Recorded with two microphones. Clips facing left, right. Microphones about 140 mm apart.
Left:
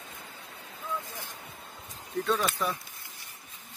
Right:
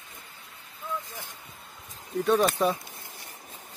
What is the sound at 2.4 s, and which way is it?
Speech, 25° right (ahead or behind).